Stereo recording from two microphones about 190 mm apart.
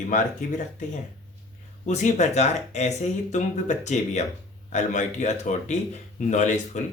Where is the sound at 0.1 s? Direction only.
45° left (ahead or behind).